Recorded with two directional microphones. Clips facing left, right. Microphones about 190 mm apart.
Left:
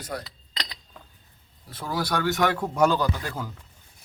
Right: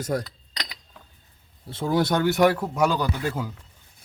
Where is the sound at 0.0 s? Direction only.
45° right (ahead or behind).